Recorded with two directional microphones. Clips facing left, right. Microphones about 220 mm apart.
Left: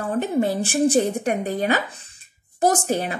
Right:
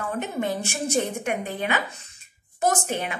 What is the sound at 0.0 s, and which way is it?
Speech, 35° left (ahead or behind).